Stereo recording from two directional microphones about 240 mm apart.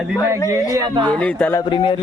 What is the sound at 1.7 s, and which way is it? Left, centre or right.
Speech, left.